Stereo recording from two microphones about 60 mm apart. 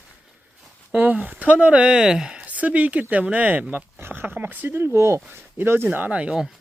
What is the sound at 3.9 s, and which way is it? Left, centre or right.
Speech, right.